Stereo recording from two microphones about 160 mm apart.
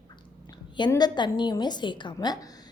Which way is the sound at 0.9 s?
25° left (ahead or behind).